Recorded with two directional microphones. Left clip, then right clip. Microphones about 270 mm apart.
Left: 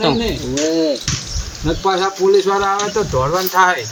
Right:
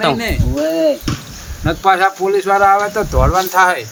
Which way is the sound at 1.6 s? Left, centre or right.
Right.